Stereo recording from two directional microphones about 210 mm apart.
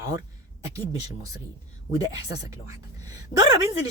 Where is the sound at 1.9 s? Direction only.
15° right (ahead or behind).